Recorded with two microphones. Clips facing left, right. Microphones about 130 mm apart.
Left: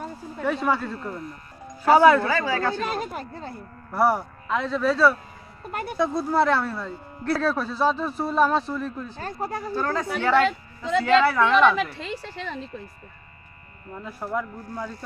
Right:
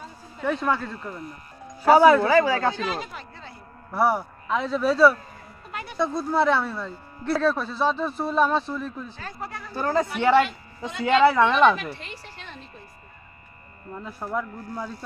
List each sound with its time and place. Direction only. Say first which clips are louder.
0.4 s speech: left 1 dB; 10° left (ahead or behind)
2.2 s a woman's voice: right 4 dB; 20° right (ahead or behind)
2.7 s speech: left 2 dB; 50° left (ahead or behind)
3.9 s speech: left 1 dB; centre (ahead or behind)
5.7 s speech: left 5 dB; 50° left (ahead or behind)
6.0 s speech: left 1 dB; 5° left (ahead or behind)
9.1 s speech: left 6 dB; 40° left (ahead or behind)
9.7 s a woman's voice: right 4 dB; 15° right (ahead or behind)
13.9 s speech: even; centre (ahead or behind)